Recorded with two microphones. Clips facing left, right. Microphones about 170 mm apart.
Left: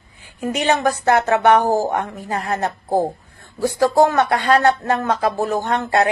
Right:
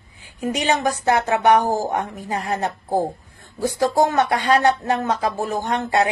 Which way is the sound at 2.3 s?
15° right (ahead or behind).